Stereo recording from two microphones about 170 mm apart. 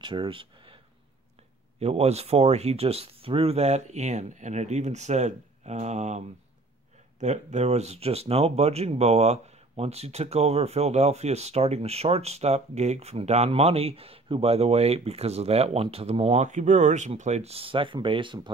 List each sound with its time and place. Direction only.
0.0 s speech: 30° right (ahead or behind)
1.8 s speech: 40° right (ahead or behind)